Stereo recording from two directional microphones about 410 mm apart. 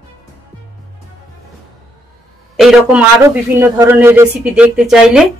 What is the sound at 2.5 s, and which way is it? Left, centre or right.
A man's voice, centre.